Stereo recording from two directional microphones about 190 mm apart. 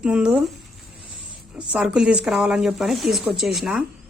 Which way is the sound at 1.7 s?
5° right (ahead or behind).